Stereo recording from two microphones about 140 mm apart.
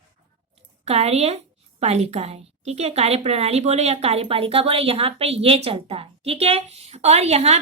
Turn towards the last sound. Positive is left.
turn(degrees=-50)  # may be behind; listen again after turning